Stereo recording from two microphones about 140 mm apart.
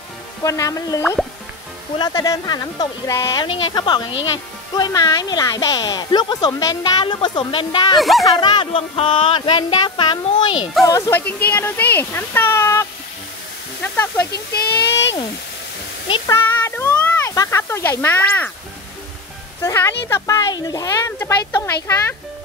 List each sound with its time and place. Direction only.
0.4 s speech: 25° left (ahead or behind)
2.0 s speech: 30° left (ahead or behind)
10.6 s speech: centre (ahead or behind)
10.9 s speech: 20° left (ahead or behind)
16.3 s a sound: 20° left (ahead or behind)
19.6 s speech: 20° left (ahead or behind)